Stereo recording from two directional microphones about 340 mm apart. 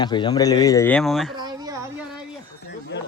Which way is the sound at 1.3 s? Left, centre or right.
Centre.